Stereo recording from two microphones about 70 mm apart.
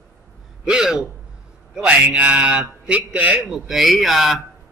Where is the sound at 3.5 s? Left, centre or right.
Centre.